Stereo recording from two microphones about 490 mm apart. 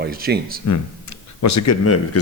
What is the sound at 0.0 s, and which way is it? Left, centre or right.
Speech, centre.